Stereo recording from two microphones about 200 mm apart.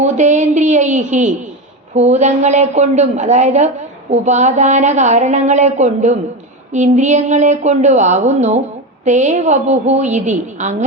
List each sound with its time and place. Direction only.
0.0 s a woman's voice: 35° right (ahead or behind)